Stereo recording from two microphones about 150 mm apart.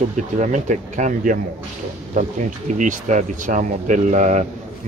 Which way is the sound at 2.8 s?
55° right (ahead or behind).